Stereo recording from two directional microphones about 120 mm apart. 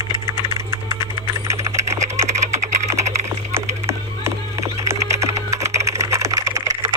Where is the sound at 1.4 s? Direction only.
25° right (ahead or behind).